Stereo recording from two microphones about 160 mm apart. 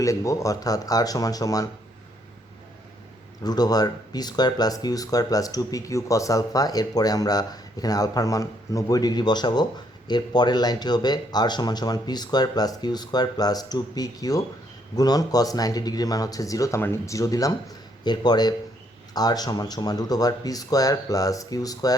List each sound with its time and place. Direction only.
0.0 s speech: 20° left (ahead or behind)
3.4 s speech: 25° left (ahead or behind)